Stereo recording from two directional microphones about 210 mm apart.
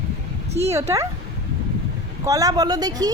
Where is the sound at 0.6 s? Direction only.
15° right (ahead or behind).